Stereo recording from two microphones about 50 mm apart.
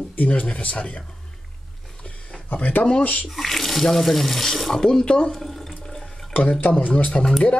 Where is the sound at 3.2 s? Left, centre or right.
Centre.